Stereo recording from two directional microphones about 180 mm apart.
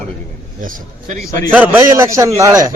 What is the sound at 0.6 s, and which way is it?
Speech, 50° right (ahead or behind).